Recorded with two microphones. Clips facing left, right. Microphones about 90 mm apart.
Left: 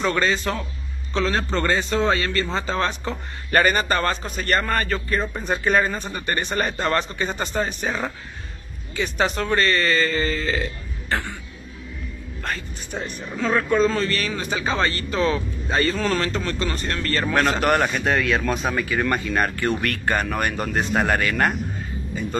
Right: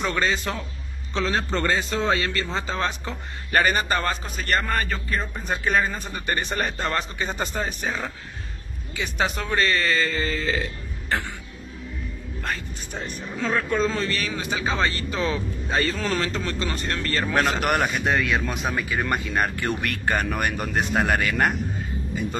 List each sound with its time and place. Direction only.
0.1 s a man's voice: 5° right (ahead or behind)
12.4 s a man's voice: centre (ahead or behind)